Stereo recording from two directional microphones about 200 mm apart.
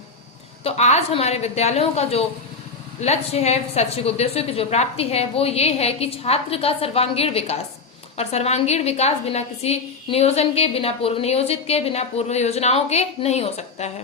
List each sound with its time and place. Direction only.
0.6 s a woman's voice: 35° left (ahead or behind)